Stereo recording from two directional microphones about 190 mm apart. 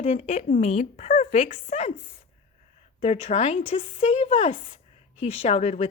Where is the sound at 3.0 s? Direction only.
30° left (ahead or behind).